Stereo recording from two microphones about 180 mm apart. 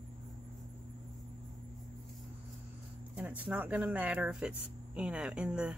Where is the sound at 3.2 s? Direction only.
5° right (ahead or behind).